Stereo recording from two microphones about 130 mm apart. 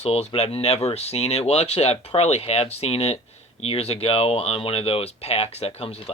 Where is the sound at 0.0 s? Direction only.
50° left (ahead or behind).